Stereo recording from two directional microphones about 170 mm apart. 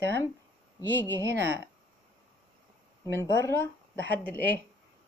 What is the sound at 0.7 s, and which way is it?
Speech, 10° left (ahead or behind).